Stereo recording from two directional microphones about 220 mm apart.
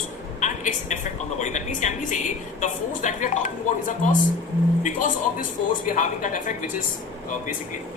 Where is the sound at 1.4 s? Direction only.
35° left (ahead or behind).